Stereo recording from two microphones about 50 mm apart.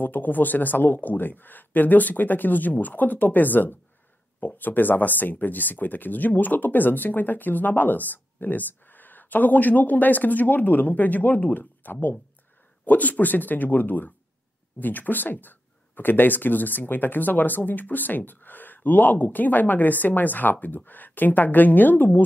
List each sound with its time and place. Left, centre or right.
0.0 s speech: left